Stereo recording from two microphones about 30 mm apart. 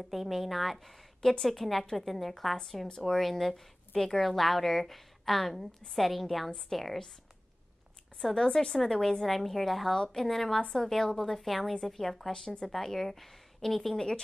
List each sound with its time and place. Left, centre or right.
0.0 s a woman's voice: centre
2.5 s a woman's voice: centre
8.2 s a woman's voice: centre
11.3 s a woman's voice: centre
12.3 s speech: left
12.6 s a woman's voice: centre
13.9 s speech: left